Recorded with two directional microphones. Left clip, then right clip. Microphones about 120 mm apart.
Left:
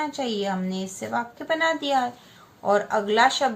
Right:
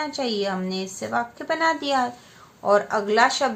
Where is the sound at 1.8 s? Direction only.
35° right (ahead or behind).